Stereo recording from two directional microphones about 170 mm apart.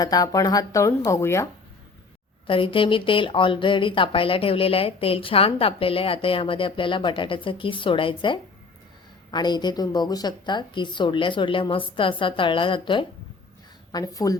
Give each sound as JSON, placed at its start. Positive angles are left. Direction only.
{"t": 0.0, "sound": "a woman's voice", "side_deg": 20}
{"t": 2.5, "sound": "a woman's voice", "side_deg": 30}